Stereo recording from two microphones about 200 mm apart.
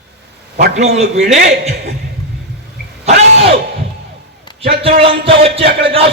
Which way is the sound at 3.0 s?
30° right (ahead or behind).